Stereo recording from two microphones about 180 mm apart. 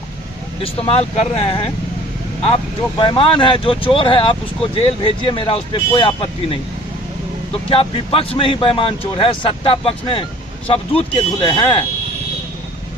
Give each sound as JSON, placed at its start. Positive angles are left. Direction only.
{"t": 0.6, "sound": "speech", "side_deg": 35}
{"t": 3.0, "sound": "speech", "side_deg": 30}